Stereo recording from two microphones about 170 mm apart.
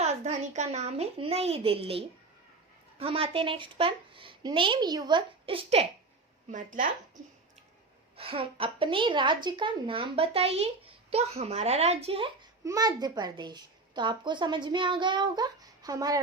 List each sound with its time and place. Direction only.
0.0 s a woman's voice: 45° right (ahead or behind)
6.5 s speech: 50° right (ahead or behind)
8.1 s a woman's voice: 35° right (ahead or behind)
12.6 s a child's voice: 20° right (ahead or behind)